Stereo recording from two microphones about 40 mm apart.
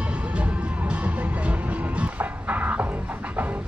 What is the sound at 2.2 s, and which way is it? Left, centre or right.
Music, right.